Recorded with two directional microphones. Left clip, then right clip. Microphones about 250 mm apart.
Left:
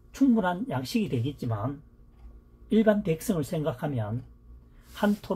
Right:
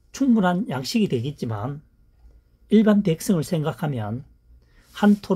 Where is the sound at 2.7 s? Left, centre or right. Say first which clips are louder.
Right 4 dB; right.